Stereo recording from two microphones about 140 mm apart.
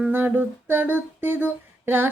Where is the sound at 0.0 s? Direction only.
15° right (ahead or behind).